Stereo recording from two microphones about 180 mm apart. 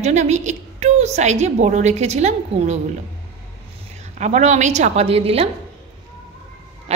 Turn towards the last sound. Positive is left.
turn(degrees=-35)  # may be behind; listen again after turning